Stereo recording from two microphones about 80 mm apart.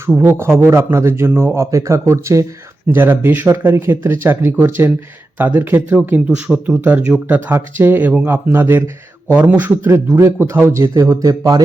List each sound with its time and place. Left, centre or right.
0.2 s speech: right
2.8 s a man's voice: right